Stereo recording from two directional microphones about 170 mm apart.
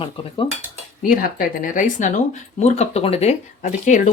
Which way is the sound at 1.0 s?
55° left (ahead or behind).